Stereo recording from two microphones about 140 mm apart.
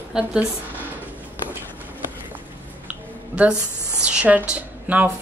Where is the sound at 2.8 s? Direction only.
10° right (ahead or behind).